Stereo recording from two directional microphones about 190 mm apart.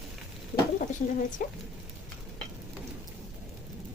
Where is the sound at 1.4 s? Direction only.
45° left (ahead or behind).